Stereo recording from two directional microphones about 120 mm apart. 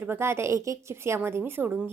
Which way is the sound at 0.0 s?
20° right (ahead or behind).